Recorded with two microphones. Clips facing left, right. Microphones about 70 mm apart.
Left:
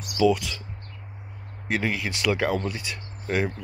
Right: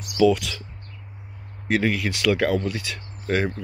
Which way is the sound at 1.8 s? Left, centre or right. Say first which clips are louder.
Right 4 dB; centre.